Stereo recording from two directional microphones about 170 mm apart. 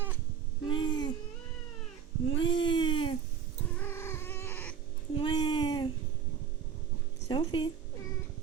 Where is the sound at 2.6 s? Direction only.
30° left (ahead or behind).